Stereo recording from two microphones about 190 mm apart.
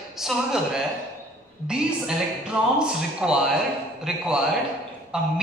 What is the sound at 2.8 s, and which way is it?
A man's voice, 5° right (ahead or behind).